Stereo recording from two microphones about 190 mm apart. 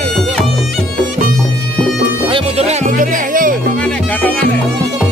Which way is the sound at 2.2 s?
30° right (ahead or behind).